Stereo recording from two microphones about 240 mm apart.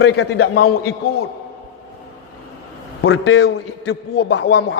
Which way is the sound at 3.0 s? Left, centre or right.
Left.